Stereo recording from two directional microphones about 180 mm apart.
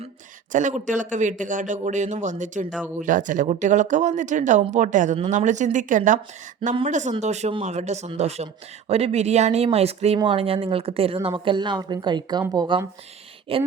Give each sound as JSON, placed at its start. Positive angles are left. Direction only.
{"t": 0.5, "sound": "a man's voice", "side_deg": -45}